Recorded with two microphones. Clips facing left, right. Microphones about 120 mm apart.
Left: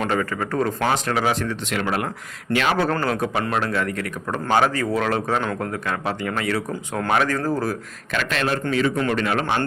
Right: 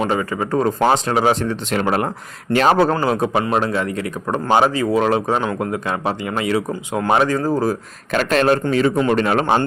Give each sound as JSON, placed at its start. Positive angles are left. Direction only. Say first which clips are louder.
{"t": 0.0, "sound": "speech", "louder": "right 3 dB", "side_deg": -15}
{"t": 2.9, "sound": "speech", "louder": "right 5 dB", "side_deg": -20}
{"t": 8.1, "sound": "speech", "louder": "right 8 dB", "side_deg": -40}